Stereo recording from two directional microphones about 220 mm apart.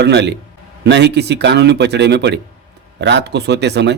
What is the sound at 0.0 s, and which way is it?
A man's voice, 50° right (ahead or behind).